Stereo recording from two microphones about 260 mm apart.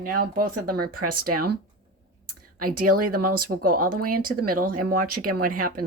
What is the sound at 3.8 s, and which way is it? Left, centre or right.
Speech, right.